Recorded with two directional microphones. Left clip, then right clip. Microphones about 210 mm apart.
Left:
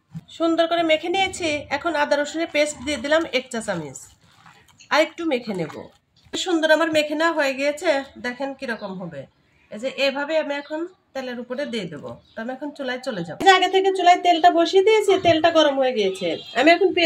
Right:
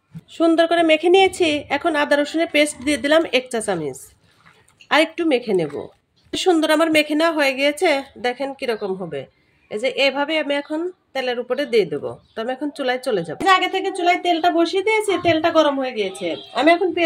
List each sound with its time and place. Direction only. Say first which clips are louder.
0.3 s a woman's voice: right 4 dB; 35° right (ahead or behind)
13.4 s speech: left 2 dB; 5° right (ahead or behind)